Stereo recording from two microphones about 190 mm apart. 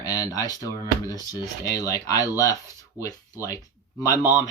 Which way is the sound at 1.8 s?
20° left (ahead or behind).